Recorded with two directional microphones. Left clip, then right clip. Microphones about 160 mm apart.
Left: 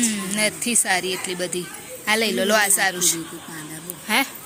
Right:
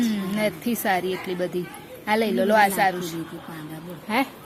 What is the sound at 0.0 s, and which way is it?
Speech, 15° right (ahead or behind).